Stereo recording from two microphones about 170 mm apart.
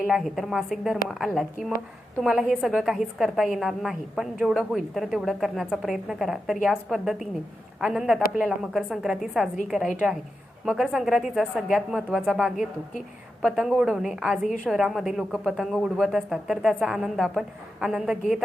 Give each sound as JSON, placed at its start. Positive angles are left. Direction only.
{"t": 0.1, "sound": "a woman's voice", "side_deg": 0}